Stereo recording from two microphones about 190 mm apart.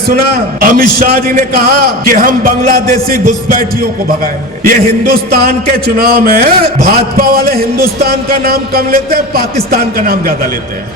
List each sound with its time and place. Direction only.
0.6 s a man's voice: 50° right (ahead or behind)